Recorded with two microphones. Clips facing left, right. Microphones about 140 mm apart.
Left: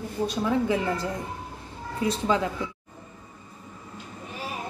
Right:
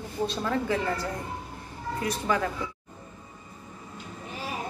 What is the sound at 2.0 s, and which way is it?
Speech, 20° left (ahead or behind).